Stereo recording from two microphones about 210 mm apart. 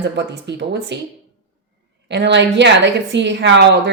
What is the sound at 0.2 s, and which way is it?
Speech, 55° right (ahead or behind).